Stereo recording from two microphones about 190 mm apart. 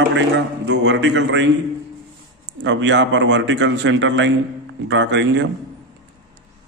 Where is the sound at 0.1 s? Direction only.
75° right (ahead or behind).